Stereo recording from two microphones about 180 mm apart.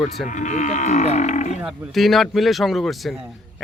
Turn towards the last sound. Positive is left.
turn(degrees=0)  # may be behind; listen again after turning